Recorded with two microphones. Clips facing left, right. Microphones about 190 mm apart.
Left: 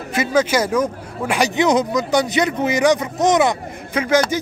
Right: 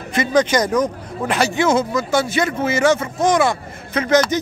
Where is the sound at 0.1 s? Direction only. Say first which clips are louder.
Right 1 dB; 5° left (ahead or behind).